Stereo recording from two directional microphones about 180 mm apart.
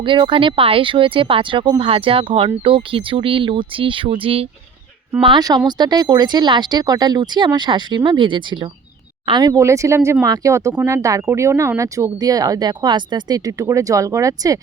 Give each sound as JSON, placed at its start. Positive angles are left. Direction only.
{"t": 0.0, "sound": "speech", "side_deg": -25}